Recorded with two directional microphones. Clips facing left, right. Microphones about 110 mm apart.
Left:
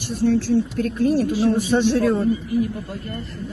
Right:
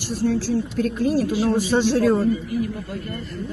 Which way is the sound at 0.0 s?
60° left (ahead or behind).